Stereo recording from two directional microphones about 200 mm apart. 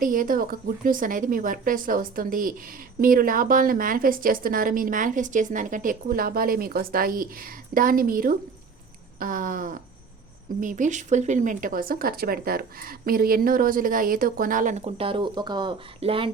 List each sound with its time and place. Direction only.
0.0 s a woman's voice: 45° right (ahead or behind); by 16.3 s 25° right (ahead or behind)